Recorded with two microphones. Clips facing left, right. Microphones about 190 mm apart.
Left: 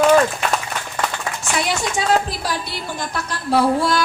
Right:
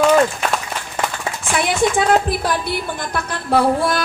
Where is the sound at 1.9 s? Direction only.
55° right (ahead or behind).